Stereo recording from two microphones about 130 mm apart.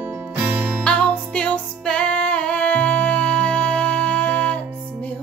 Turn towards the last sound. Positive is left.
turn(degrees=10)  # may be behind; listen again after turning